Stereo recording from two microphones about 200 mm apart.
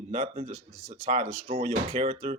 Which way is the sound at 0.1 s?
30° right (ahead or behind).